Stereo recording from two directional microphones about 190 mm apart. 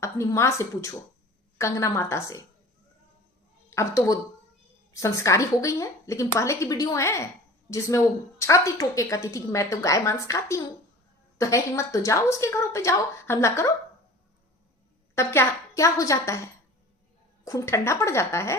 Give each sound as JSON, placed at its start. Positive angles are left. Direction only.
{"t": 0.0, "sound": "a woman's voice", "side_deg": 15}
{"t": 3.7, "sound": "a woman's voice", "side_deg": 15}
{"t": 15.1, "sound": "a woman's voice", "side_deg": 15}